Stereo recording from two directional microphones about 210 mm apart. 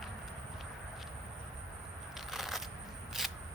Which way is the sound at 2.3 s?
Centre (ahead or behind).